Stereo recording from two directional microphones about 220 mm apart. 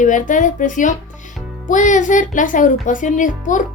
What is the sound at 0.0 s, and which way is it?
Speech, 35° left (ahead or behind).